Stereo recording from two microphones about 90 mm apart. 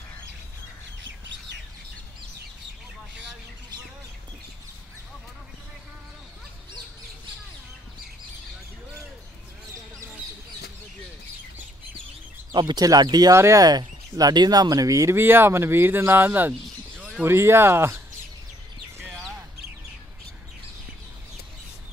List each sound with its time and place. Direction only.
12.5 s speech: 55° right (ahead or behind); by 15.1 s 40° right (ahead or behind)
15.1 s speech: 25° right (ahead or behind)
16.9 s a sound: 10° left (ahead or behind)
17.2 s speech: 30° right (ahead or behind)